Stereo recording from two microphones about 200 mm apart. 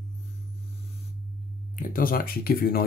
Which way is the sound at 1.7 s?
45° left (ahead or behind).